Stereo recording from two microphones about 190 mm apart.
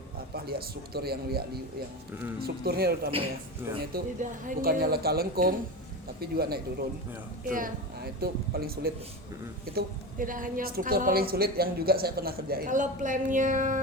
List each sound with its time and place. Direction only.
0.3 s a man's voice: 55° right (ahead or behind)